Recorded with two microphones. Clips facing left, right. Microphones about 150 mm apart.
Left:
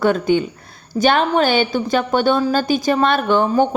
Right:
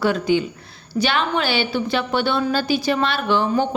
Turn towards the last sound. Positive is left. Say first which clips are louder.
# left 4 dB
turn(degrees=50)  # may be behind; listen again after turning